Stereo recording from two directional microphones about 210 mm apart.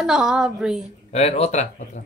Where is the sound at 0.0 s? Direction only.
5° right (ahead or behind).